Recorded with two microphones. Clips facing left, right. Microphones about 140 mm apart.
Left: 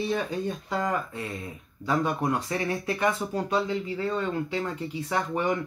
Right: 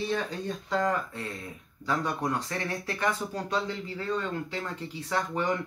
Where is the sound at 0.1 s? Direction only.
15° left (ahead or behind).